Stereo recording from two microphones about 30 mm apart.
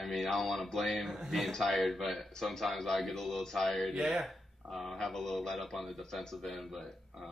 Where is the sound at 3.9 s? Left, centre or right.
Centre.